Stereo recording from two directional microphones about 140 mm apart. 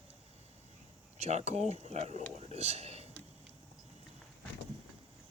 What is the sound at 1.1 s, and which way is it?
Speech, 50° right (ahead or behind).